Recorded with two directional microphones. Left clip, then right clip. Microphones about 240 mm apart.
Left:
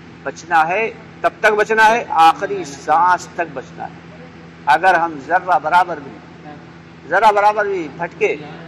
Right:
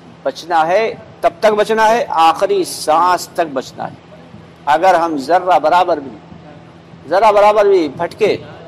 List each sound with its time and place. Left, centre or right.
0.5 s a man's voice: right
7.2 s a man's voice: right